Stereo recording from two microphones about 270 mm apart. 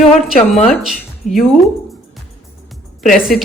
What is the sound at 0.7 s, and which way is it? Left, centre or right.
Speech, centre.